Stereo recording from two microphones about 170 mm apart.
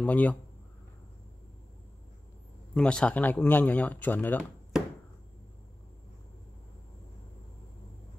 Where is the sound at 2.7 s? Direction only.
5° left (ahead or behind).